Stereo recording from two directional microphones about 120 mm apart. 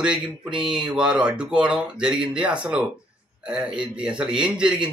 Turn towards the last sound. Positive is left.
turn(degrees=-10)  # may be behind; listen again after turning